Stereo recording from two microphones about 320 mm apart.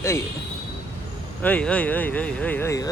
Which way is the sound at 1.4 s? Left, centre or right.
Centre.